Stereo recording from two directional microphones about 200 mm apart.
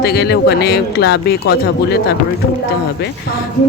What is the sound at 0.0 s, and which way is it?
Speech, 55° left (ahead or behind).